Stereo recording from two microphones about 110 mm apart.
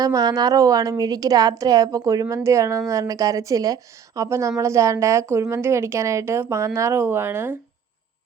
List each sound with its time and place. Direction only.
0.0 s a woman's voice: 35° right (ahead or behind)